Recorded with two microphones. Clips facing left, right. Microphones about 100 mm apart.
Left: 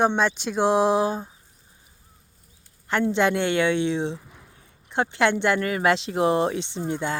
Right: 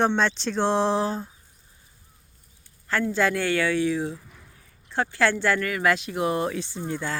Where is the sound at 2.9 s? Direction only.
20° left (ahead or behind).